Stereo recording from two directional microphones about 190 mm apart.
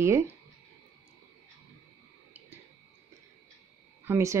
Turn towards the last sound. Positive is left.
turn(degrees=-15)  # may be behind; listen again after turning